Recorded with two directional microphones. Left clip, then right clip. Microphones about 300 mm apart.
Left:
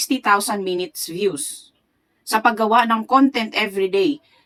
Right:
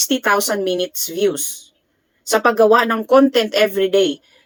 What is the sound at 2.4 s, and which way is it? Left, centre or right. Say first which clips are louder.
Speech: right 3 dB; centre.